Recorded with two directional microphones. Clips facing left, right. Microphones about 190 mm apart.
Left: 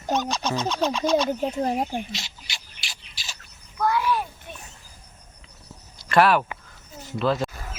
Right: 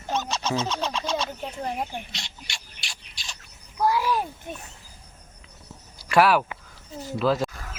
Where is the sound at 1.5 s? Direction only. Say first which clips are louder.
Left 6 dB; 40° left (ahead or behind).